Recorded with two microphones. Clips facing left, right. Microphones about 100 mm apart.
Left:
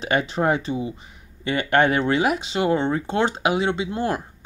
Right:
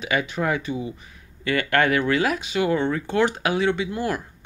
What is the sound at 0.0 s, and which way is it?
Speech, 30° left (ahead or behind).